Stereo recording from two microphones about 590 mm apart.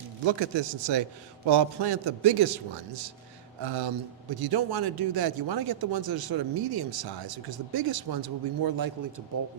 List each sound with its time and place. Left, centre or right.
0.3 s a man's voice: right
3.6 s a man's voice: right